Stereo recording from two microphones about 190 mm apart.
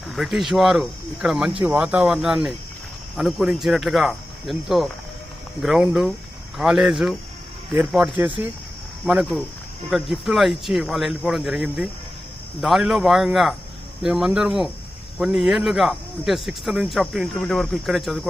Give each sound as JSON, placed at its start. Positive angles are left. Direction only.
{"t": 0.1, "sound": "speech", "side_deg": 0}